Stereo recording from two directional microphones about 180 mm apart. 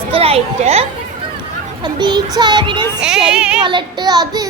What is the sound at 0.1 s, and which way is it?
Speech, 35° right (ahead or behind).